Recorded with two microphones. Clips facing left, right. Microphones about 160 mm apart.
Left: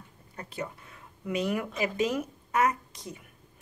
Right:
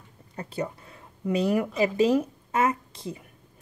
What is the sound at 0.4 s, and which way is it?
Speech, 30° right (ahead or behind).